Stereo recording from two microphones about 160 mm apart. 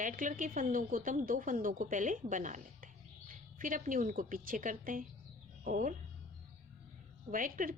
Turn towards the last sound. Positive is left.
turn(degrees=-60)  # may be behind; listen again after turning